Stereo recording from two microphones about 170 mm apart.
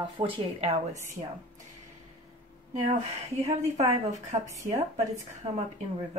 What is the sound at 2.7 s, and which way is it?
Speech, 45° right (ahead or behind).